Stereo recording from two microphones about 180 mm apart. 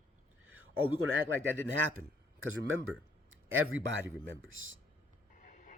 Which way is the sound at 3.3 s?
90° right.